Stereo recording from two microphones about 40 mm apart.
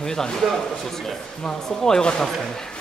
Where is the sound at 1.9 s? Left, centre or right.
Centre.